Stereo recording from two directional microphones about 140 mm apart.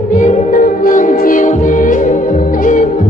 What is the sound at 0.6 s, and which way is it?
Music, 75° left (ahead or behind).